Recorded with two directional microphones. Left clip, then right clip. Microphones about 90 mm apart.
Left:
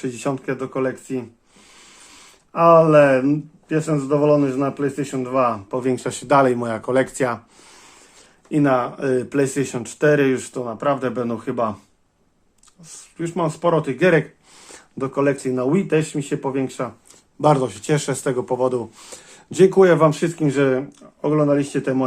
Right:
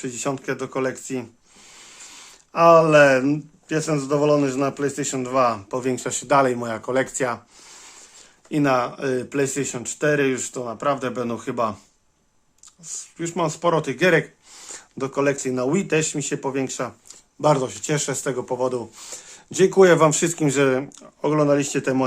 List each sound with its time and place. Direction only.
0.0 s speech: centre (ahead or behind)
0.3 s a man's voice: 20° right (ahead or behind)
1.8 s a sound: 40° right (ahead or behind)
4.0 s a man's voice: 30° right (ahead or behind)
5.8 s speech: 5° right (ahead or behind)
8.4 s a man's voice: 20° right (ahead or behind)
9.0 s speech: 5° right (ahead or behind)
10.6 s speech: 10° right (ahead or behind)
11.3 s a man's voice: 20° right (ahead or behind)
13.3 s a man's voice: 25° right (ahead or behind)
13.9 s speech: 10° right (ahead or behind)
15.5 s speech: 15° right (ahead or behind)
17.4 s speech: centre (ahead or behind)
20.0 s speech: 35° right (ahead or behind)